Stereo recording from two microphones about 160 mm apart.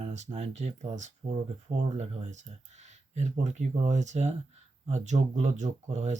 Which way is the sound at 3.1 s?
45° right (ahead or behind).